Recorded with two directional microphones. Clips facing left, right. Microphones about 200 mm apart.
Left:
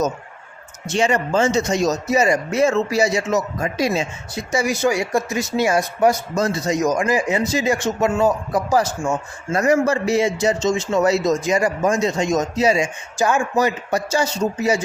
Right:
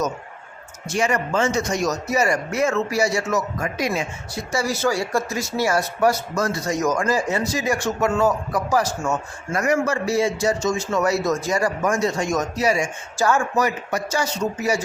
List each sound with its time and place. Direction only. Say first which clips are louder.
0.9 s speech: left 3 dB; 25° left (ahead or behind)
9.0 s a man's voice: left 2 dB; 10° left (ahead or behind)
9.5 s speech: left 4 dB; 25° left (ahead or behind)
13.6 s speech: left 3 dB; 25° left (ahead or behind)